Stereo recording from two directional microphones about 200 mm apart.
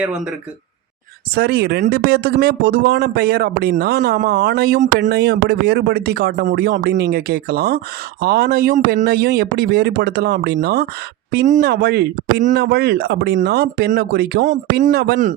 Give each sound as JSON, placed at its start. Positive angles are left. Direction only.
{"t": 0.0, "sound": "speech", "side_deg": -5}
{"t": 1.4, "sound": "speech", "side_deg": -50}